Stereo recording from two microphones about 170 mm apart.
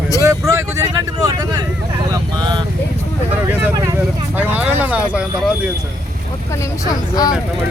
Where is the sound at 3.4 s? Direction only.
10° right (ahead or behind).